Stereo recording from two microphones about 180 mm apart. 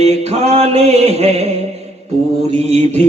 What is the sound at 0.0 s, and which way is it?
Mantra, 35° right (ahead or behind).